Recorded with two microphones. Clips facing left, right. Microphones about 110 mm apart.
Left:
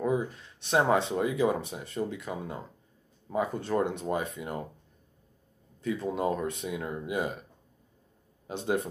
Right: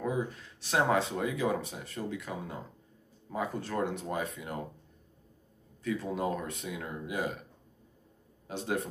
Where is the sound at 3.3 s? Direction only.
15° left (ahead or behind).